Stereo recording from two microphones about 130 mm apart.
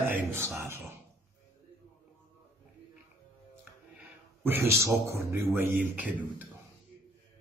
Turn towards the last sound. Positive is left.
turn(degrees=-10)  # may be behind; listen again after turning